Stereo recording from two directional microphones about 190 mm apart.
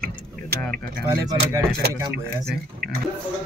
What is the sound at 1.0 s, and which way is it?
Speech, 15° right (ahead or behind).